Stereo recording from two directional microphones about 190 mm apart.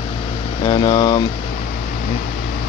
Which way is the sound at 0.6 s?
25° left (ahead or behind).